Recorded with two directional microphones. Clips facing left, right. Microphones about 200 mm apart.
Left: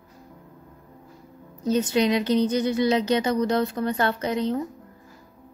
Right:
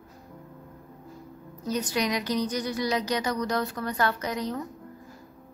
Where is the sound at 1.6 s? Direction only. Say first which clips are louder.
Left 7 dB; 25° left (ahead or behind).